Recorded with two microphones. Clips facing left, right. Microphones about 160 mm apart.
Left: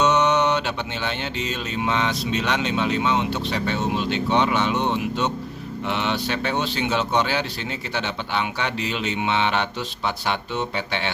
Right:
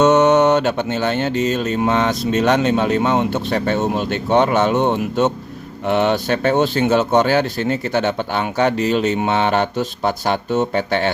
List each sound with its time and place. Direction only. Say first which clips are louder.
0.0 s music: right 7 dB; 50° right (ahead or behind)